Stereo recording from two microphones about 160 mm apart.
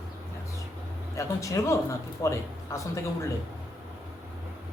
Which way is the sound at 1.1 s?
20° left (ahead or behind).